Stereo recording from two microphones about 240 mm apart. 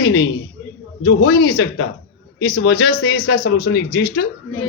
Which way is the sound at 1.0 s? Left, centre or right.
Left.